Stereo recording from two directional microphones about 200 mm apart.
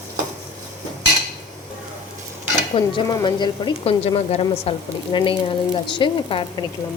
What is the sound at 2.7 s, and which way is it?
Speech, 25° left (ahead or behind).